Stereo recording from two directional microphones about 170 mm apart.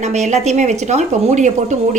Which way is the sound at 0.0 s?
45° right (ahead or behind).